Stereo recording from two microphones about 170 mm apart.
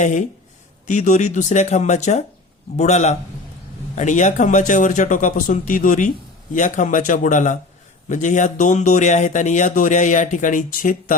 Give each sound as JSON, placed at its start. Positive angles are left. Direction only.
{"t": 0.0, "sound": "a man's voice", "side_deg": 45}